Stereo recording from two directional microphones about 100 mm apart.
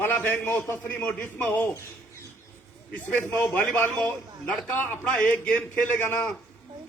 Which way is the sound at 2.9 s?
15° left (ahead or behind).